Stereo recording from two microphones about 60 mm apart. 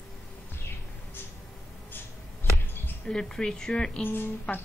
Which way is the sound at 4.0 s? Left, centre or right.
Left.